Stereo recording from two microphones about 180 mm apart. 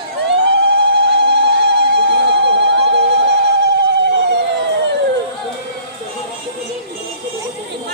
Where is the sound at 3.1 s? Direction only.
70° right (ahead or behind).